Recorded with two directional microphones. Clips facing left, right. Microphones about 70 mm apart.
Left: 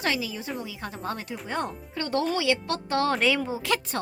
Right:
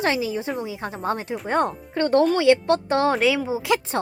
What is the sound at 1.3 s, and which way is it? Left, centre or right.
Speech, right.